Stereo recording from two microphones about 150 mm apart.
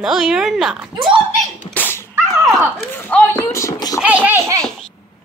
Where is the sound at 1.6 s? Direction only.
10° left (ahead or behind).